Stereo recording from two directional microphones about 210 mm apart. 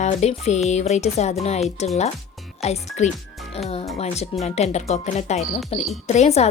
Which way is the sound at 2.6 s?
30° left (ahead or behind).